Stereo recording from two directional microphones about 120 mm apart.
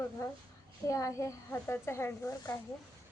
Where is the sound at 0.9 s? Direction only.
25° left (ahead or behind).